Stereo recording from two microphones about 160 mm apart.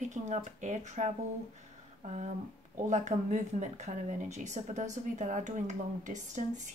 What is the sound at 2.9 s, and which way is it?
Speech, 50° right (ahead or behind).